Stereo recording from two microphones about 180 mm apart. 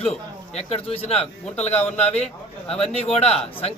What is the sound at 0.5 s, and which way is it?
A man's voice, 35° left (ahead or behind).